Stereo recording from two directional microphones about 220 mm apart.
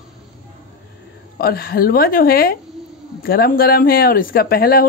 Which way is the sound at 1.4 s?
45° left (ahead or behind).